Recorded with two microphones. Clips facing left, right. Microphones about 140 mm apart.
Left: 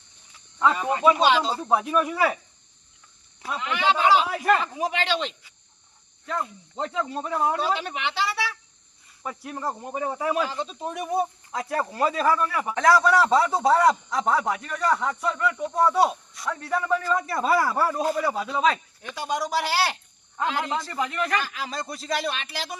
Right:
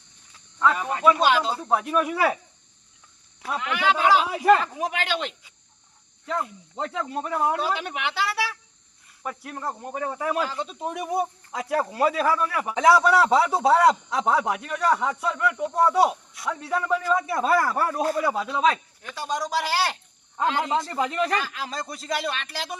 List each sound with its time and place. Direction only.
0.7 s speech: centre (ahead or behind)
3.4 s speech: centre (ahead or behind)
4.3 s speech: 15° right (ahead or behind)
4.5 s speech: centre (ahead or behind)
10.6 s speech: 10° right (ahead or behind)
17.2 s speech: centre (ahead or behind)
19.1 s speech: 10° left (ahead or behind)
20.7 s a man's voice: 25° right (ahead or behind)
21.2 s speech: centre (ahead or behind)